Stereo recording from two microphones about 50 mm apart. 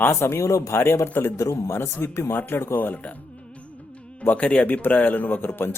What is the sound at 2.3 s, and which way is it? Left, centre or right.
Speech, left.